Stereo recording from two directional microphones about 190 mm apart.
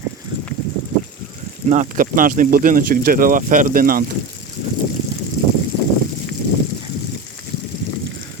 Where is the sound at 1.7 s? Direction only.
40° right (ahead or behind).